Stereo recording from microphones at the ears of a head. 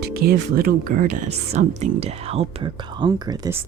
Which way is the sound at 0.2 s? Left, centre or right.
Right.